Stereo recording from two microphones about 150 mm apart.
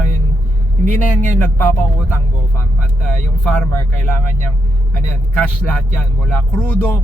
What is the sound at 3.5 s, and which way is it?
Speech, 10° left (ahead or behind).